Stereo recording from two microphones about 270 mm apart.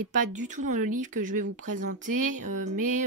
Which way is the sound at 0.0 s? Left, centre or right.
Right.